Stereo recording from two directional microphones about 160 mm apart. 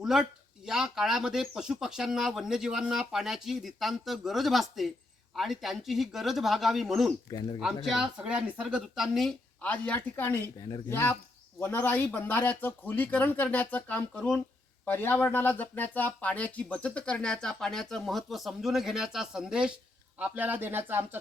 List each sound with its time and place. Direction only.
0.0 s speech: 5° right (ahead or behind)
7.3 s speech: 25° left (ahead or behind)
7.6 s a man's voice: centre (ahead or behind)